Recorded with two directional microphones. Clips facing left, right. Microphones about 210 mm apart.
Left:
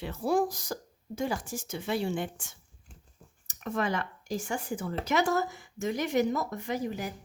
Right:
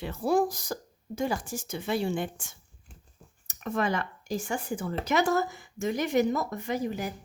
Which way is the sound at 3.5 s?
50° right (ahead or behind).